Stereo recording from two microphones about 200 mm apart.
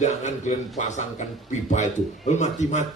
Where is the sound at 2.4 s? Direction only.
35° left (ahead or behind).